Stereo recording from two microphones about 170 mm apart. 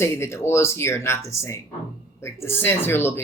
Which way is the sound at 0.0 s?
15° left (ahead or behind).